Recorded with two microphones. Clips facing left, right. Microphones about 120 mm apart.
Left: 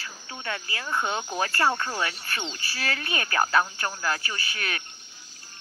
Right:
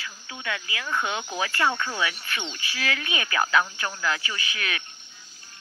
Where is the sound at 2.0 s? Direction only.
40° left (ahead or behind).